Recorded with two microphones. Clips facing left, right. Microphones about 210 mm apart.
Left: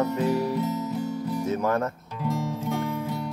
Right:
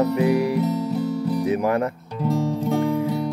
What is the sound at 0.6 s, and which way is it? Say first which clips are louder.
Music: right 5 dB; 35° right (ahead or behind).